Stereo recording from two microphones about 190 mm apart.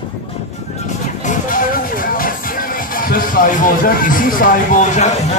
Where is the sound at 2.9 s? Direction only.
45° left (ahead or behind).